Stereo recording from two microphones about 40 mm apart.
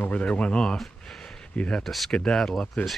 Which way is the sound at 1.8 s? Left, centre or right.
Centre.